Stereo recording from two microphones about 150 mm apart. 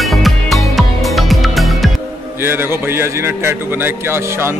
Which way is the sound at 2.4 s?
15° right (ahead or behind).